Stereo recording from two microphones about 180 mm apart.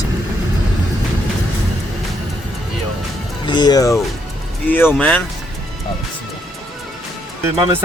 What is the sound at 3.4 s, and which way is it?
Speech, 25° left (ahead or behind).